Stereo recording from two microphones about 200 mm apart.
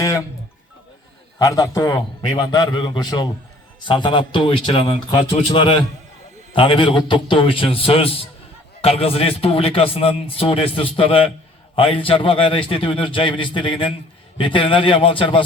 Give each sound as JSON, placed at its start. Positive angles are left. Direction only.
{"t": 0.0, "sound": "music", "side_deg": 15}
{"t": 1.4, "sound": "a man's voice", "side_deg": 15}